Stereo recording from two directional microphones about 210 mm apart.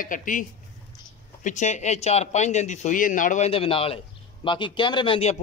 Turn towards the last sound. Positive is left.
turn(degrees=25)  # may be behind; listen again after turning